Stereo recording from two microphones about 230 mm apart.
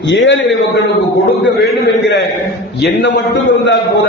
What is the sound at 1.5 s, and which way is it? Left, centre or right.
A man's voice, left.